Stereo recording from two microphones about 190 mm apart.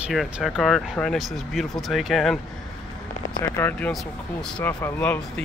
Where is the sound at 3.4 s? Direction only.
15° left (ahead or behind).